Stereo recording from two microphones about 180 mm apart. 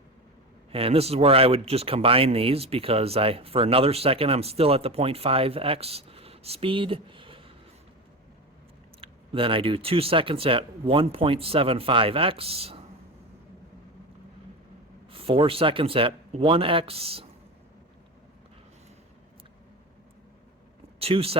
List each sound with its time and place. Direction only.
0.7 s speech: 30° right (ahead or behind)
9.0 s speech: 30° right (ahead or behind)
15.1 s speech: 30° right (ahead or behind)
21.0 s speech: 30° right (ahead or behind)